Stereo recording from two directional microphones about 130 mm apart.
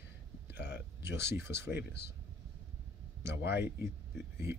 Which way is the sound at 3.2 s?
20° right (ahead or behind).